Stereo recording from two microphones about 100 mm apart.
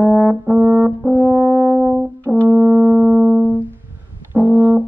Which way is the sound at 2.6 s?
5° right (ahead or behind).